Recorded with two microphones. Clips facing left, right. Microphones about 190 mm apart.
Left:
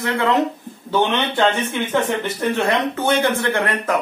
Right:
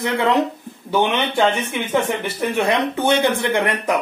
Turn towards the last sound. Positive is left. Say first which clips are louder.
# right 1 dB
turn(degrees=-15)  # may be behind; listen again after turning